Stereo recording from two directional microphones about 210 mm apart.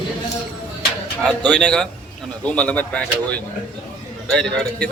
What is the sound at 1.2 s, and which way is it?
A man's voice, 5° left (ahead or behind).